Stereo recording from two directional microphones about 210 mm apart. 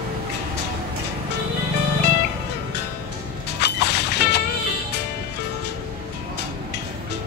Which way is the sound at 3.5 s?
50° left (ahead or behind).